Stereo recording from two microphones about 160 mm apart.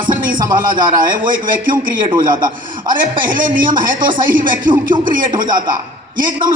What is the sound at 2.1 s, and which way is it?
Speech, 25° right (ahead or behind).